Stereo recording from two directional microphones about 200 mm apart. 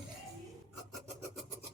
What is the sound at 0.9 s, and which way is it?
Filing, centre (ahead or behind).